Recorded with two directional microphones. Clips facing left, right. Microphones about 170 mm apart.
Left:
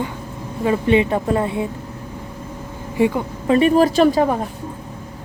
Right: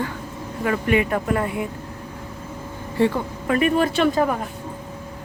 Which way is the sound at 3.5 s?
30° left (ahead or behind).